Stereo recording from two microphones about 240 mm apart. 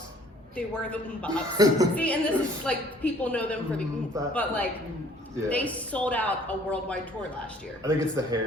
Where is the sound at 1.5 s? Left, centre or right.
Centre.